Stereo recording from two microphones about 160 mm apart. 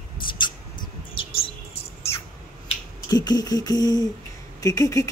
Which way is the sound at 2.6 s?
25° left (ahead or behind).